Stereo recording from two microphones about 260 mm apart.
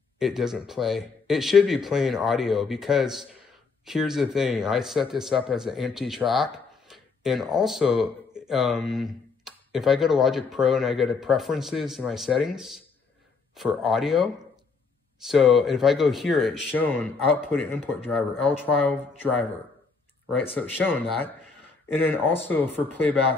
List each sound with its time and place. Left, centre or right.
0.2 s speech: centre
20.5 s speech: centre